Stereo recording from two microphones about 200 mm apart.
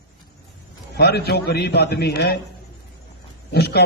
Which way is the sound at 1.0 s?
55° left (ahead or behind).